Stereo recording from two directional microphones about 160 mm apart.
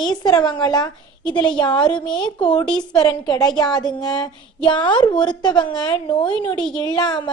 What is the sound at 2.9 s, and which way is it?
A woman's voice, 25° left (ahead or behind).